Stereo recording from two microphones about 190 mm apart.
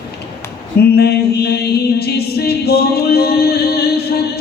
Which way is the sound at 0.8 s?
55° left (ahead or behind).